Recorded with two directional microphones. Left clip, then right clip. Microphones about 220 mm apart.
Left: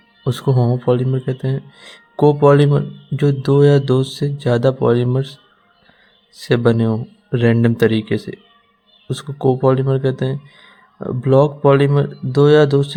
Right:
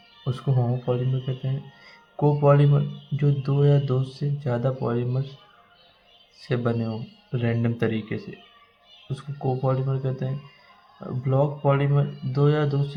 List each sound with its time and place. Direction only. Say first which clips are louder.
0.3 s speech: left 10 dB; 40° left (ahead or behind)
6.4 s speech: left 11 dB; 45° left (ahead or behind)